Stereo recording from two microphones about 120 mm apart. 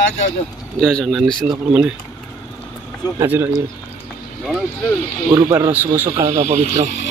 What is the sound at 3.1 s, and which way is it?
Speech, 15° right (ahead or behind).